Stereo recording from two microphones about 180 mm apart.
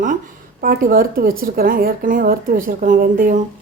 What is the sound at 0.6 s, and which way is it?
Speech, 50° right (ahead or behind).